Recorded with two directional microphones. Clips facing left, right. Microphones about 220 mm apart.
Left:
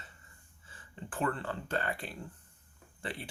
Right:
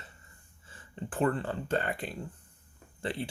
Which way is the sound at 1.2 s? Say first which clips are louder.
Right 5 dB; 25° right (ahead or behind).